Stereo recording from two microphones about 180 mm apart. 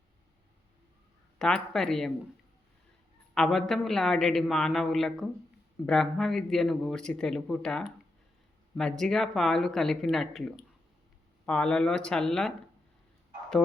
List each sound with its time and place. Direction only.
1.4 s a man's voice: 5° left (ahead or behind)
3.3 s a man's voice: 5° left (ahead or behind)